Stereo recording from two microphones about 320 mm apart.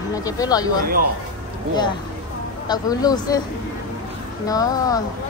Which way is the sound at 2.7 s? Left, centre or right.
Centre.